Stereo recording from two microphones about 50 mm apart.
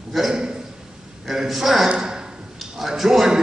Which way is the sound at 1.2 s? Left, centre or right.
Centre.